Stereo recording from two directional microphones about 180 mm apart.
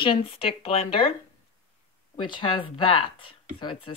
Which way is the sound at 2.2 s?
25° left (ahead or behind).